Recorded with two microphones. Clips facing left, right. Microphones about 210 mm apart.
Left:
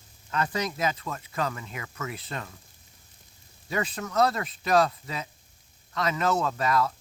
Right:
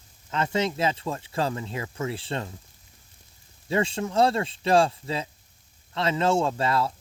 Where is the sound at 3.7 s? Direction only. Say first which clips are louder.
Right 5 dB; 25° right (ahead or behind).